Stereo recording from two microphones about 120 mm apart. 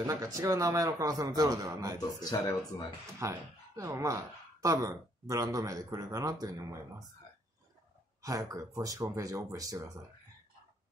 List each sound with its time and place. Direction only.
0.0 s a man's voice: 25° right (ahead or behind)
2.3 s speech: 25° left (ahead or behind)
3.2 s speech: 25° right (ahead or behind)
8.2 s a man's voice: 25° right (ahead or behind)